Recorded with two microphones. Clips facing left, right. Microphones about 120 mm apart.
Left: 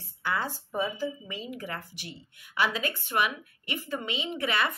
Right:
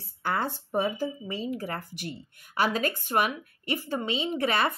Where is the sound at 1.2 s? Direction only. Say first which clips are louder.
Right 6 dB; 35° right (ahead or behind).